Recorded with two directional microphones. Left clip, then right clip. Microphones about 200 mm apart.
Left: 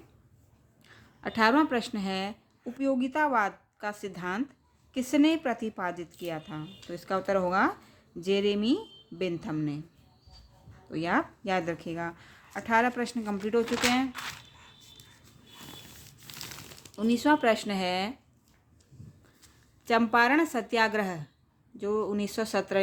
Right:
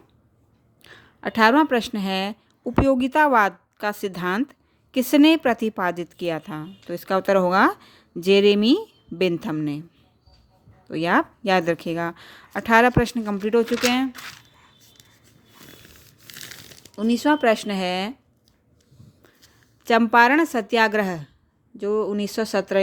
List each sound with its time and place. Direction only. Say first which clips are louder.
0.8 s a woman's voice: right 8 dB; 40° right (ahead or behind)
10.8 s a woman's voice: right 8 dB; 40° right (ahead or behind)
14.4 s a sound: even; 15° right (ahead or behind)
16.9 s a woman's voice: right 5 dB; 30° right (ahead or behind)
19.8 s a woman's voice: right 8 dB; 40° right (ahead or behind)